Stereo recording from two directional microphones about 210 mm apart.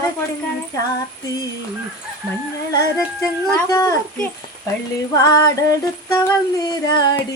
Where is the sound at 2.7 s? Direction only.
15° left (ahead or behind).